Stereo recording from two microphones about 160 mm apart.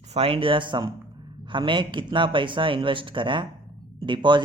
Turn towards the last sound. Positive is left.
turn(degrees=-30)  # may be behind; listen again after turning